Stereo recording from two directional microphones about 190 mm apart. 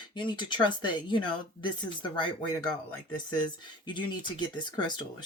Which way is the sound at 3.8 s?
25° left (ahead or behind).